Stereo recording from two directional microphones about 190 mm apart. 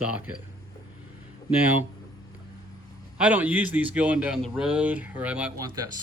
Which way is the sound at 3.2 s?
5° right (ahead or behind).